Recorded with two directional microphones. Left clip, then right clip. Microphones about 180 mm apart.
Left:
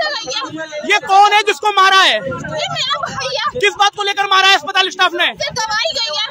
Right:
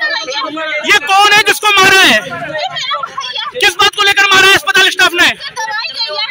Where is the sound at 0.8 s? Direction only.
10° left (ahead or behind).